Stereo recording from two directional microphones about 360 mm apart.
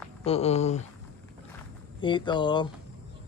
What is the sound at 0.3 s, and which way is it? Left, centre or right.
Speech, centre.